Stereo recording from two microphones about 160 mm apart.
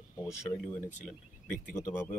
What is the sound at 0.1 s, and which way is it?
Speech, 15° left (ahead or behind).